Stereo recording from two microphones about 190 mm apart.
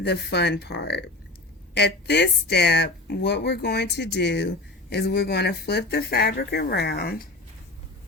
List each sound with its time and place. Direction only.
0.0 s speech: 60° left (ahead or behind)